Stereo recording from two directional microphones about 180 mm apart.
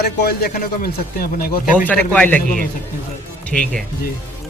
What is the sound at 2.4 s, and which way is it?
Speech, 50° left (ahead or behind).